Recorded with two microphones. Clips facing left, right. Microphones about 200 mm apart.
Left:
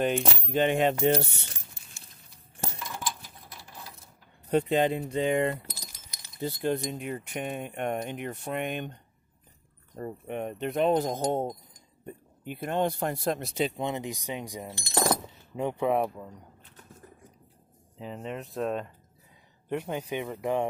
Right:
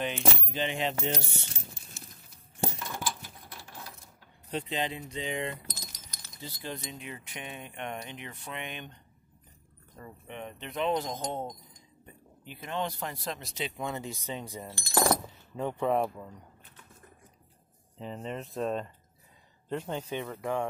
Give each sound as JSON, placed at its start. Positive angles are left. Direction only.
{"t": 0.5, "sound": "speech", "side_deg": 50}
{"t": 4.5, "sound": "speech", "side_deg": 55}
{"t": 5.7, "sound": "keys jangling", "side_deg": 10}
{"t": 6.4, "sound": "speech", "side_deg": 55}
{"t": 9.9, "sound": "speech", "side_deg": 45}
{"t": 13.7, "sound": "speech", "side_deg": 20}
{"t": 17.9, "sound": "speech", "side_deg": 5}